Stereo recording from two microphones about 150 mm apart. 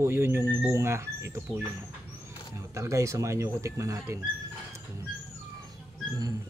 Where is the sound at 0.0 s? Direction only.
15° right (ahead or behind).